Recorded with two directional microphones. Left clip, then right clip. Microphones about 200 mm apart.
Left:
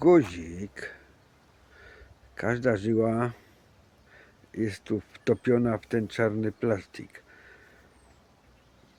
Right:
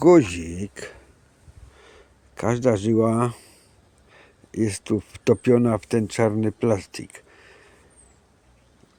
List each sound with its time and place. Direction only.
0.0 s speech: 45° right (ahead or behind)